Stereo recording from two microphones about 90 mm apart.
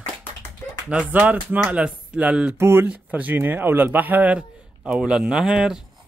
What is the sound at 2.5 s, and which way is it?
Speech, 25° right (ahead or behind).